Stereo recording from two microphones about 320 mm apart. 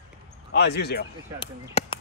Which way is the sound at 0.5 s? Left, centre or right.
Left.